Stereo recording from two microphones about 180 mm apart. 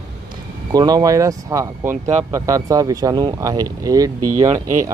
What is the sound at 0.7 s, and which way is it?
Speech, 20° right (ahead or behind).